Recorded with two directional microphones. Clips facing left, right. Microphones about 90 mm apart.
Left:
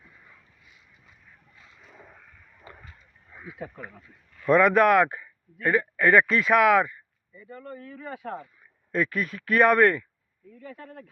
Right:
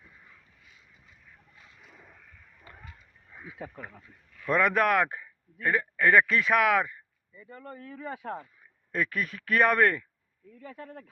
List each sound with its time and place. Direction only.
4.4 s speech: centre (ahead or behind)
7.5 s speech: 30° right (ahead or behind)
8.9 s speech: centre (ahead or behind)